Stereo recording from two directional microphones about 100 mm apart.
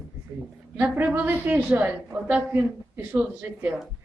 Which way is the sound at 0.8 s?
15° right (ahead or behind).